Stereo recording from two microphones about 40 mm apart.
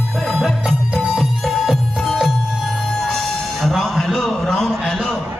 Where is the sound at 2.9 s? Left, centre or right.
Centre.